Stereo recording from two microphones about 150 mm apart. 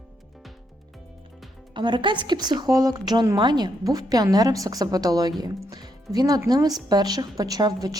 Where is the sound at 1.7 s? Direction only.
30° right (ahead or behind).